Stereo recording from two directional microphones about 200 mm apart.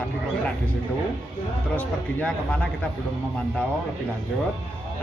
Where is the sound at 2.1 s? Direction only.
5° left (ahead or behind).